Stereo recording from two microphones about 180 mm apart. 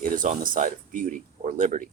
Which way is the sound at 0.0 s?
50° right (ahead or behind).